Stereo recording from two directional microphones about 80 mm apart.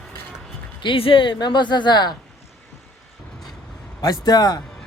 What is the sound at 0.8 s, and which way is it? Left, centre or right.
Speech, left.